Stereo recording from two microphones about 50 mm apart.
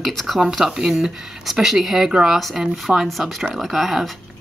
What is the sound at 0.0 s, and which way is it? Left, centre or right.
Speech, centre.